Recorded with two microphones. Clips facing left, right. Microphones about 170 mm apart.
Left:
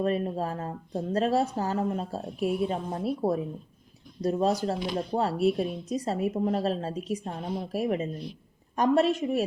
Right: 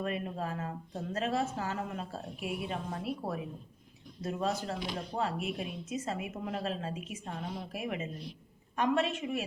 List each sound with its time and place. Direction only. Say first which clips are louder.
0.0 s speech: left 8 dB; 35° left (ahead or behind)